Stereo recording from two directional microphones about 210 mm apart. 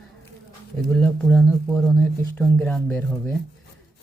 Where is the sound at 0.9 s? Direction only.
5° left (ahead or behind).